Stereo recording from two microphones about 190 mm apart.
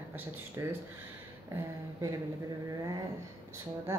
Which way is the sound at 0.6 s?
15° right (ahead or behind).